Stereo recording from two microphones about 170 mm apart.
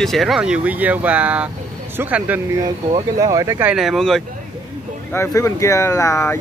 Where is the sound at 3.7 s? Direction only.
Centre (ahead or behind).